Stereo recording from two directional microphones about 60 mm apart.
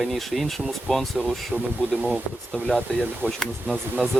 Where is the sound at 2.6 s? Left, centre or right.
Centre.